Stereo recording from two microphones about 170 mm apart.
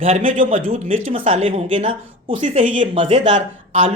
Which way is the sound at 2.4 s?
45° right (ahead or behind).